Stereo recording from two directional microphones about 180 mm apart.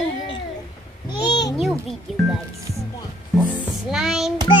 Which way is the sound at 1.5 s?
Centre (ahead or behind).